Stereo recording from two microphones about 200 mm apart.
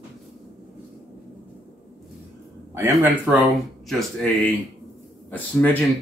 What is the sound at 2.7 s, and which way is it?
Speech, 15° right (ahead or behind).